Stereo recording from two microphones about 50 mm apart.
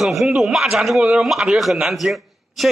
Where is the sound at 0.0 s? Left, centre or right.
Centre.